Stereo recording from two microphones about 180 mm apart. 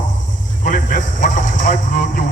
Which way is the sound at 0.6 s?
45° left (ahead or behind).